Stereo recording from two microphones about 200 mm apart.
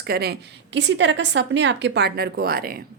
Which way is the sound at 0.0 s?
55° right (ahead or behind).